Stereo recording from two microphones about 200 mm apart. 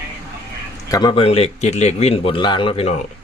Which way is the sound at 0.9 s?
20° left (ahead or behind).